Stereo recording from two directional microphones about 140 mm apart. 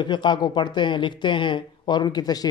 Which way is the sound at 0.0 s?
35° left (ahead or behind).